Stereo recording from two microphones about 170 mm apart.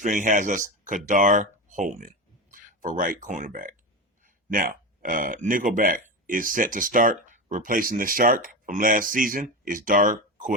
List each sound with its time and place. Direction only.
0.0 s speech: 50° right (ahead or behind)